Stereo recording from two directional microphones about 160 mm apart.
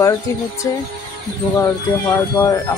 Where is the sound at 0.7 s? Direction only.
20° left (ahead or behind).